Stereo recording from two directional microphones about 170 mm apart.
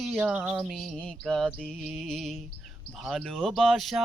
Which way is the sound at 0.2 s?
10° right (ahead or behind).